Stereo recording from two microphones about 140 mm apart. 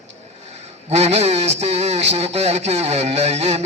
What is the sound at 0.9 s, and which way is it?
Speech, 50° right (ahead or behind).